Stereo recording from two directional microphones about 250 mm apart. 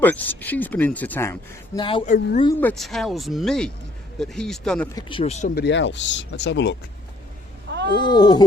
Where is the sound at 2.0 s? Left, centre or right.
Left.